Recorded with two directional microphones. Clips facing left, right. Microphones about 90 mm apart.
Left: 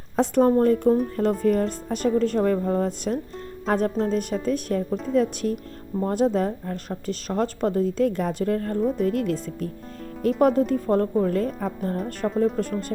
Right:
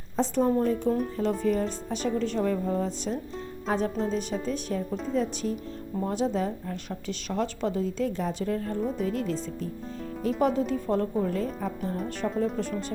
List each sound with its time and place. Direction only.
0.2 s speech: 55° left (ahead or behind)